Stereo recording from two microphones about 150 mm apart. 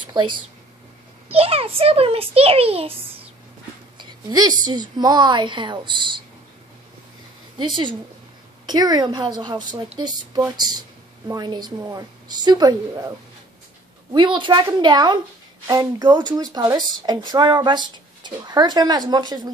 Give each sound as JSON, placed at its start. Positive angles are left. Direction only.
{"t": 0.0, "sound": "a sound", "side_deg": -30}
{"t": 1.3, "sound": "a child's voice", "side_deg": -40}
{"t": 4.0, "sound": "a sound", "side_deg": -25}
{"t": 4.6, "sound": "a child's voice", "side_deg": -25}
{"t": 7.5, "sound": "a child's voice", "side_deg": -30}
{"t": 14.1, "sound": "a woman's voice", "side_deg": -30}